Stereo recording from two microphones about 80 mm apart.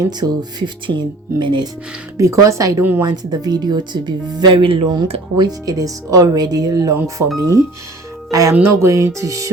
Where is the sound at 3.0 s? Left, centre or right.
Right.